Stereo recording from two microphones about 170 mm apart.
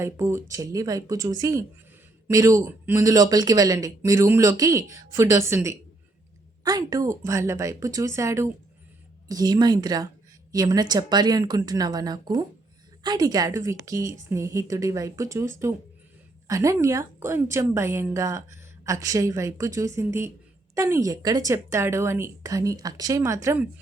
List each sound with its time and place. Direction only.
0.0 s a woman's voice: 15° right (ahead or behind)